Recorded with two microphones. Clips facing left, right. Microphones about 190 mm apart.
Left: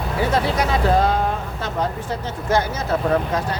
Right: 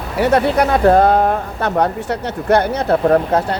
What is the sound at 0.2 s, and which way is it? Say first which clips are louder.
Speech: right 7 dB; 65° right (ahead or behind).